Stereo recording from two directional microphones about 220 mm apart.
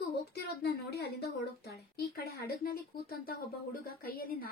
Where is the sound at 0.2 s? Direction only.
45° left (ahead or behind).